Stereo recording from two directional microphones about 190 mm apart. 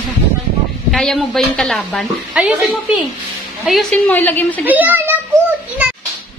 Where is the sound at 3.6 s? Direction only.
Centre (ahead or behind).